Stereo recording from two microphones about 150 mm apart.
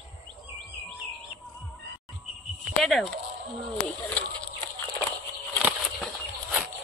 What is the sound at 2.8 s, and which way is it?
Speech, centre (ahead or behind).